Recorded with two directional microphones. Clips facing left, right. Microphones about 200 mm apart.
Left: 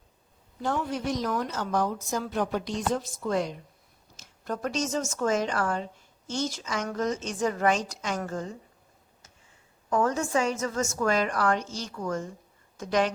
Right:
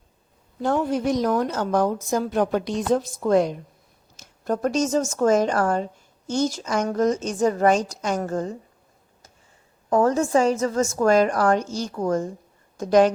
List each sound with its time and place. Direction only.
0.6 s a woman's voice: 50° right (ahead or behind)
9.9 s a woman's voice: 35° right (ahead or behind)